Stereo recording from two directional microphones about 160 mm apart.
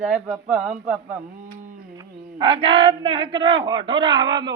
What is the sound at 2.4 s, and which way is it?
Speech, 35° right (ahead or behind).